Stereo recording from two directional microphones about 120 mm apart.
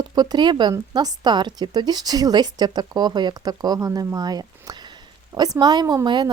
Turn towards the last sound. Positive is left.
turn(degrees=-40)  # may be behind; listen again after turning